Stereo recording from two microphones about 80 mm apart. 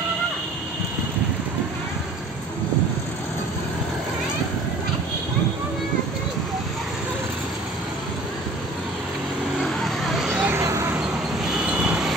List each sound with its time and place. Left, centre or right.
9.6 s vehicle: centre
10.4 s a sound: right
11.7 s vehicle: centre